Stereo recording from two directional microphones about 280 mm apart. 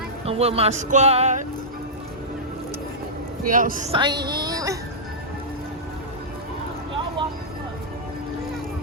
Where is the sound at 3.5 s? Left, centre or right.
Right; by 4.7 s centre.